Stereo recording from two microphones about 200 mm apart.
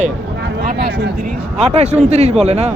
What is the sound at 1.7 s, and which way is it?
Speech, 35° right (ahead or behind).